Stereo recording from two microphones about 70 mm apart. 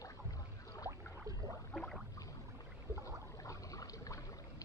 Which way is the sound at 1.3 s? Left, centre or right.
Right.